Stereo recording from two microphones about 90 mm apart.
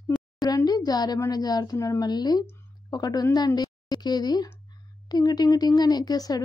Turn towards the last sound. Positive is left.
turn(degrees=45)  # may be behind; listen again after turning